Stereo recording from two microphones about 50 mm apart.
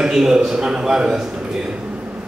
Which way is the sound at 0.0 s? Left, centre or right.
Centre.